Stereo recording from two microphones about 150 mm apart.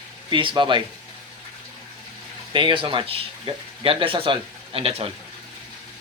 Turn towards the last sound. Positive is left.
turn(degrees=-40)  # may be behind; listen again after turning